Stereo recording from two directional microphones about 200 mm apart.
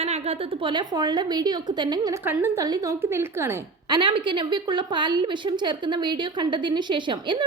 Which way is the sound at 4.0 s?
25° right (ahead or behind).